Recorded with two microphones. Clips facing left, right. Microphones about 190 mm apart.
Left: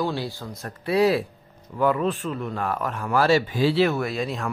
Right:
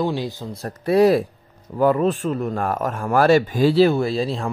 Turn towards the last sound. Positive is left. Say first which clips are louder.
# right 5 dB
turn(degrees=-30)  # may be behind; listen again after turning